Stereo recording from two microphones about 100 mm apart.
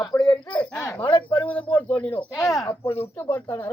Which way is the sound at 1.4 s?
15° left (ahead or behind).